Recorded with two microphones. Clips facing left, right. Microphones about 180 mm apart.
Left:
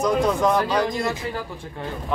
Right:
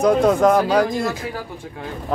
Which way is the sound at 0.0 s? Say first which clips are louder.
Right 5 dB; 55° right (ahead or behind).